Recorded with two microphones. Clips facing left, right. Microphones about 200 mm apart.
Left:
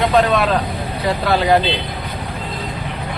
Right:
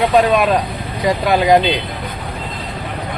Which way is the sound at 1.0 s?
15° right (ahead or behind).